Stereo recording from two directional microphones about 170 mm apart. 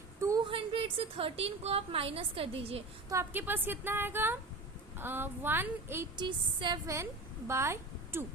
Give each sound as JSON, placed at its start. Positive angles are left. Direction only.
{"t": 0.2, "sound": "a sound", "side_deg": -20}
{"t": 0.4, "sound": "a woman's voice", "side_deg": -30}
{"t": 3.1, "sound": "a woman's voice", "side_deg": -15}
{"t": 6.1, "sound": "a woman's voice", "side_deg": -25}